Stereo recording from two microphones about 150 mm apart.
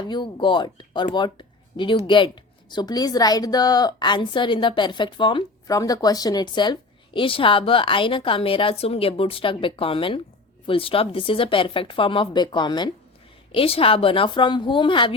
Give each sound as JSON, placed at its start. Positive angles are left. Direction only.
{"t": 0.1, "sound": "speech", "side_deg": 30}